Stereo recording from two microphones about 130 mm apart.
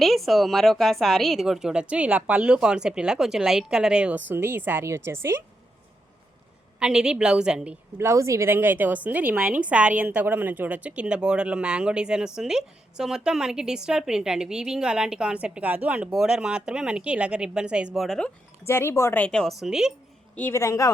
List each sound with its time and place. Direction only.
0.0 s a woman's voice: centre (ahead or behind); by 5.4 s 20° right (ahead or behind)
6.7 s speech: 5° right (ahead or behind)
7.9 s a woman's voice: 20° right (ahead or behind); by 18.3 s centre (ahead or behind)
18.6 s a man's voice: 20° left (ahead or behind)
19.2 s a woman's voice: 5° left (ahead or behind)
20.3 s a man's voice: 15° left (ahead or behind)